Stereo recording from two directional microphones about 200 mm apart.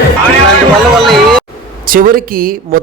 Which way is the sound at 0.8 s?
Centre (ahead or behind).